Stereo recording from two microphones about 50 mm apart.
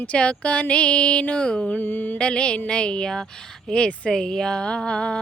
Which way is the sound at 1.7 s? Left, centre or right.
Left.